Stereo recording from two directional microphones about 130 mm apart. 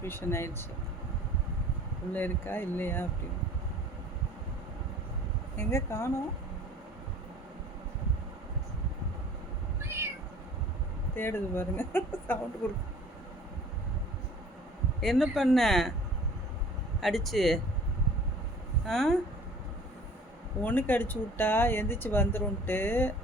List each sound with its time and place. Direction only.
0.0 s speech: 20° left (ahead or behind)
2.1 s speech: 15° left (ahead or behind)
5.5 s speech: 20° left (ahead or behind)
9.8 s cat: 20° right (ahead or behind)
11.1 s speech: 15° left (ahead or behind)
15.0 s speech: centre (ahead or behind)
17.0 s speech: centre (ahead or behind)
18.9 s speech: 5° left (ahead or behind)
20.6 s speech: 15° left (ahead or behind)